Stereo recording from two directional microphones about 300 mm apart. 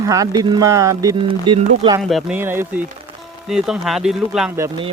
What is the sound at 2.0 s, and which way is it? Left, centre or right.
Speech, centre.